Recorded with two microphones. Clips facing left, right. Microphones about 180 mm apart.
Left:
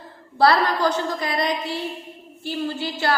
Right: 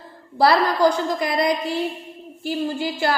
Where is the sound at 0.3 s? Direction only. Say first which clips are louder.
Right 1 dB; 10° right (ahead or behind).